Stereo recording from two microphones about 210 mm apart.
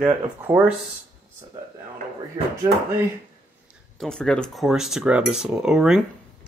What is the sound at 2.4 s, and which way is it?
Speech, 20° right (ahead or behind).